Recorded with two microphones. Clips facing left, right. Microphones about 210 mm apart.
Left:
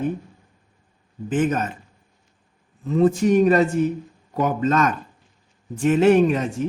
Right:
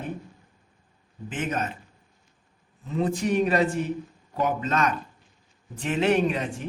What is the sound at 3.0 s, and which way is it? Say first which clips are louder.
Speech: left 7 dB; 45° left (ahead or behind).